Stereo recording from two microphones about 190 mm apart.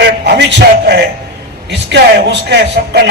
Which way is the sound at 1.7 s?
65° right (ahead or behind).